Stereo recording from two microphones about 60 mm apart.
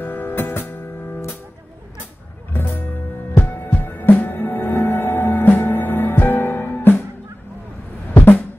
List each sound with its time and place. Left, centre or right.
0.0 s music: left
2.5 s music: left
8.1 s music: left